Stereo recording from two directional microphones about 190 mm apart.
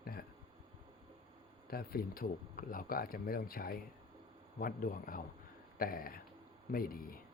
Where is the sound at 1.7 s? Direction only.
50° left (ahead or behind).